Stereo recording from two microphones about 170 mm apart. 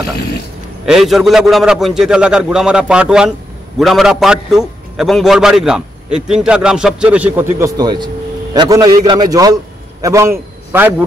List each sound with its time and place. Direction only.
0.8 s a man's voice: centre (ahead or behind)